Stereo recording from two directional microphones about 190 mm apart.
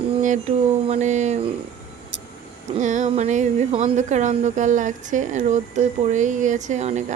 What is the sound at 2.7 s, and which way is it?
Speech, 40° right (ahead or behind).